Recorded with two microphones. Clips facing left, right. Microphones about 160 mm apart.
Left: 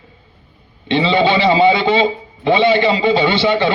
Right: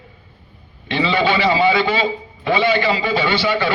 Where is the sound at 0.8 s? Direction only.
25° left (ahead or behind).